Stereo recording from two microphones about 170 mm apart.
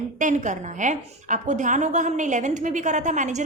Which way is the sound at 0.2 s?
45° right (ahead or behind).